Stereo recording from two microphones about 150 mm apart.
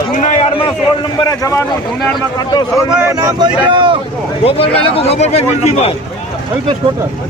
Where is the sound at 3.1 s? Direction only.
25° right (ahead or behind).